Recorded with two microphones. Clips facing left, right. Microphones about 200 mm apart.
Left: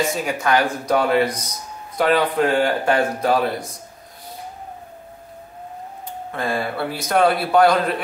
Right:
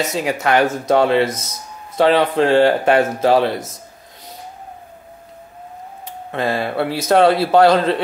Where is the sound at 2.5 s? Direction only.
75° right (ahead or behind).